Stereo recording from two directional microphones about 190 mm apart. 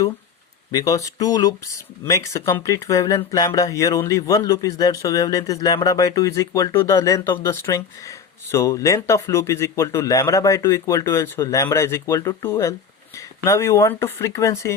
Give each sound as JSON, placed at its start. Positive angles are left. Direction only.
{"t": 0.7, "sound": "speech", "side_deg": 20}